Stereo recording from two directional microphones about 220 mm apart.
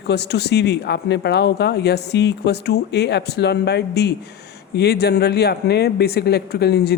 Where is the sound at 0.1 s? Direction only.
50° left (ahead or behind).